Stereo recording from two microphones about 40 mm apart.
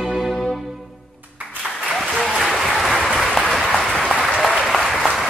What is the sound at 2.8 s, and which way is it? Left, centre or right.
Applause, centre.